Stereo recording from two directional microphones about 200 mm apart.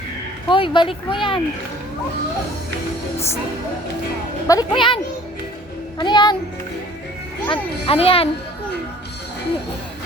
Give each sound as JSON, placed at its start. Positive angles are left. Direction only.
{"t": 0.4, "sound": "speech", "side_deg": 25}
{"t": 4.4, "sound": "a child's voice", "side_deg": 20}
{"t": 6.0, "sound": "a child's voice", "side_deg": 20}
{"t": 7.5, "sound": "a child's voice", "side_deg": 30}